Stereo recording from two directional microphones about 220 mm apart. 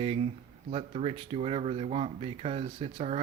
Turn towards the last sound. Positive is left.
turn(degrees=-30)  # may be behind; listen again after turning